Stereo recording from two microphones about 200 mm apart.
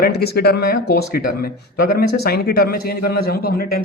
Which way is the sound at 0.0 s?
55° left (ahead or behind).